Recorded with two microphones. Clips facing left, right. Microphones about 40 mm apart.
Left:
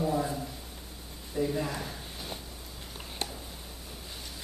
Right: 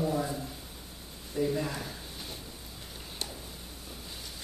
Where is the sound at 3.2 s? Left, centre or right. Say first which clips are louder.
Left 3 dB; left.